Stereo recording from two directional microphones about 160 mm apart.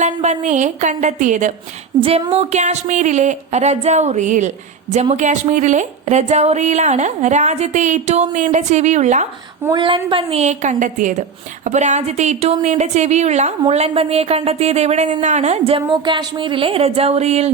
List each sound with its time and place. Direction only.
0.0 s a woman's voice: 45° right (ahead or behind)
2.0 s a woman's voice: 35° right (ahead or behind)
9.7 s a woman's voice: 30° right (ahead or behind)